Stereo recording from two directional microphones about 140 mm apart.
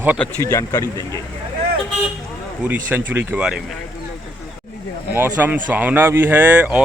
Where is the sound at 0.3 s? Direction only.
20° left (ahead or behind).